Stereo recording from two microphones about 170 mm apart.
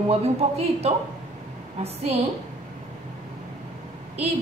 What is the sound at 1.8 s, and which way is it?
Speech, 40° right (ahead or behind).